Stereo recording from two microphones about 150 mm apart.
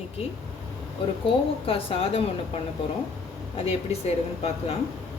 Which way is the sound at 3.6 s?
45° left (ahead or behind).